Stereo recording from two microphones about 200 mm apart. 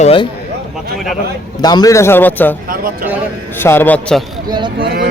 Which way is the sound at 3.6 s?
10° left (ahead or behind).